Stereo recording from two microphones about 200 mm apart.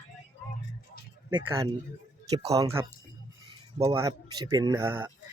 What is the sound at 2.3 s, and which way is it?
Speech, 20° right (ahead or behind).